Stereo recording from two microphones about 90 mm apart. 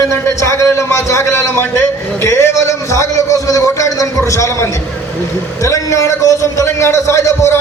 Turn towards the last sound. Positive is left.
turn(degrees=30)  # may be behind; listen again after turning